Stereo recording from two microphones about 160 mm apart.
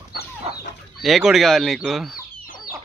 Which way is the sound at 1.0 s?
Centre (ahead or behind).